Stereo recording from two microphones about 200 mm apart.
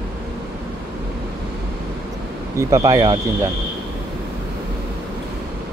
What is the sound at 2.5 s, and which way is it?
Speech, 15° right (ahead or behind).